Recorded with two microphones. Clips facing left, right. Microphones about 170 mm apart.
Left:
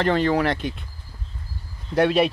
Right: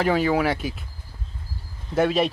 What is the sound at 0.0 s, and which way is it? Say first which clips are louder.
Speech: left 1 dB; 10° right (ahead or behind).